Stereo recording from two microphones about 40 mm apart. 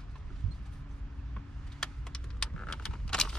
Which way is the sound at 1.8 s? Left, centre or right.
Centre.